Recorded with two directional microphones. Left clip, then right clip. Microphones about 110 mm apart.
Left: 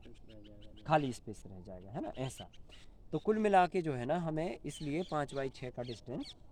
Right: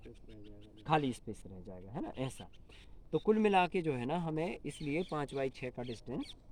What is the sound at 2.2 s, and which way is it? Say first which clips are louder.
Speech: right 1 dB; 35° left (ahead or behind).